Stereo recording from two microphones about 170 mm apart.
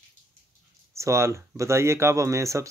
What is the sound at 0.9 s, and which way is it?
Speech, 15° right (ahead or behind).